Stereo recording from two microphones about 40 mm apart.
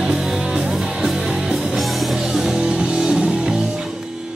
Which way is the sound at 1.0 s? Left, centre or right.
Centre.